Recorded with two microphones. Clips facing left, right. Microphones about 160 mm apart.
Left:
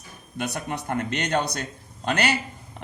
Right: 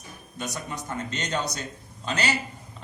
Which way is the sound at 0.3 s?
60° left (ahead or behind).